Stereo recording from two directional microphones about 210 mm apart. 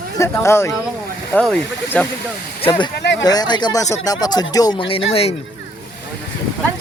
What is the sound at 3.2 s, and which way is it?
Speech, 20° left (ahead or behind).